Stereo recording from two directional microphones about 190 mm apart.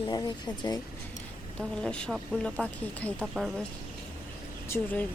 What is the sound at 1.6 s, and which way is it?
Speech, 5° left (ahead or behind).